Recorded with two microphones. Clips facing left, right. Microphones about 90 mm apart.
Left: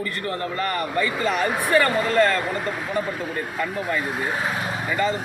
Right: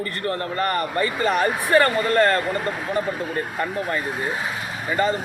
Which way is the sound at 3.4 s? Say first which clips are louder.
Right 1 dB; 40° right (ahead or behind).